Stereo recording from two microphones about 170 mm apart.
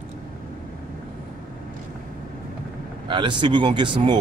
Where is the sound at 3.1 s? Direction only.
30° right (ahead or behind).